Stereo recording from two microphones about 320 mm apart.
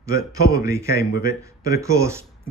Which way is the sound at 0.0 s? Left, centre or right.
Centre.